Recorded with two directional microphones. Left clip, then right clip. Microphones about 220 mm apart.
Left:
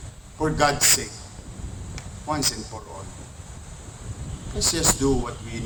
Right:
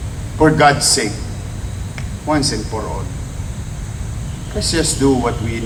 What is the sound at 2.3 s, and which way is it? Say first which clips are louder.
Speech: right 10 dB; 50° left (ahead or behind).